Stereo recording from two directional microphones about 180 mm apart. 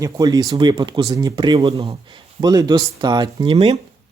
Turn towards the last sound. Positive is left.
turn(degrees=-35)  # may be behind; listen again after turning